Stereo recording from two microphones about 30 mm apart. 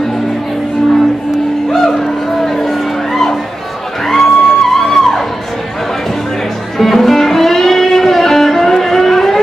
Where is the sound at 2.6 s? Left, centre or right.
Centre.